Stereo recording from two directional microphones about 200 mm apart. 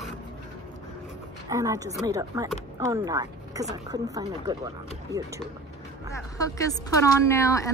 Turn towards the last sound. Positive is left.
turn(degrees=15)  # may be behind; listen again after turning